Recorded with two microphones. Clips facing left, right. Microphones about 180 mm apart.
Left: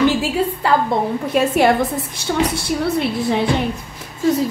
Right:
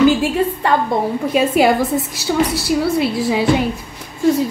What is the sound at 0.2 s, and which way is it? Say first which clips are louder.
A woman's voice: right 2 dB; 5° left (ahead or behind).